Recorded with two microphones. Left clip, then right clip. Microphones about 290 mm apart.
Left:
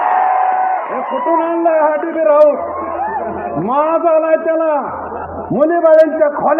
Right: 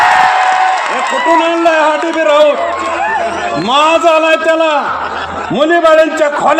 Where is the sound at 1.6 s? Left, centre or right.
Right.